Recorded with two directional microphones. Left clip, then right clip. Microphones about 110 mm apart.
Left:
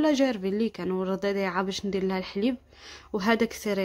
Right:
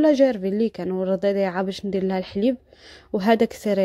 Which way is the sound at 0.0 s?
25° right (ahead or behind).